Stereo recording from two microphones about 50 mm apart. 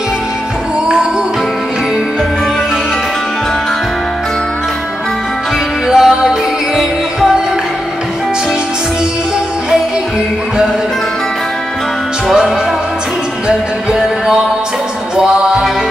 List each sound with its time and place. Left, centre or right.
5.9 s music: centre
13.9 s music: centre